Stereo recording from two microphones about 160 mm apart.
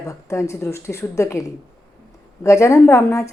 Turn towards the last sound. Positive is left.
turn(degrees=20)  # may be behind; listen again after turning